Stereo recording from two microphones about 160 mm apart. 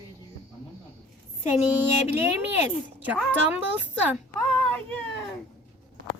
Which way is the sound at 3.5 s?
10° right (ahead or behind).